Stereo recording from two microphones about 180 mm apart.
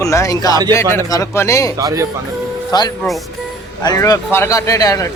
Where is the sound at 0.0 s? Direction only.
15° left (ahead or behind).